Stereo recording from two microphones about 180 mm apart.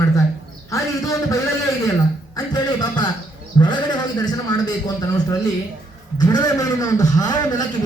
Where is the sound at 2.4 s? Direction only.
20° left (ahead or behind).